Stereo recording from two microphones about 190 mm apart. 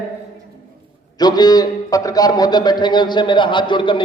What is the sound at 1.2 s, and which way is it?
A man's voice, 20° left (ahead or behind).